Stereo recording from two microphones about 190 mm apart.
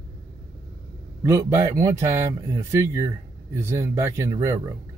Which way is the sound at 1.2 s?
15° right (ahead or behind).